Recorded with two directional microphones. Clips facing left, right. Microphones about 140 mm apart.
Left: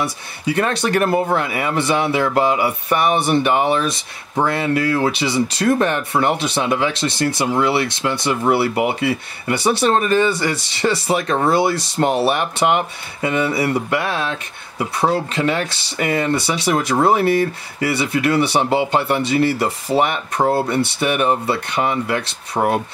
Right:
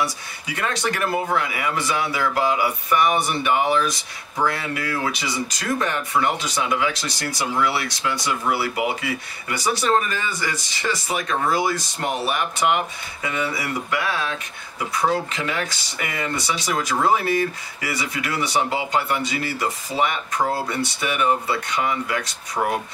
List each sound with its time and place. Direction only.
0.0 s speech: 30° left (ahead or behind)